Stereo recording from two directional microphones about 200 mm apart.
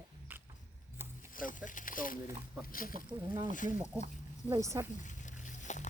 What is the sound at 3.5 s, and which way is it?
Speech, 40° left (ahead or behind).